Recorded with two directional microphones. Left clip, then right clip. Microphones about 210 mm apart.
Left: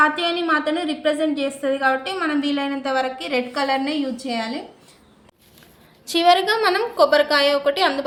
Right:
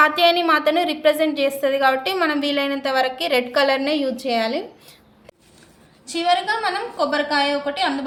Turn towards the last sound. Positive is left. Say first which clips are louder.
# left 3 dB
turn(degrees=50)  # may be behind; listen again after turning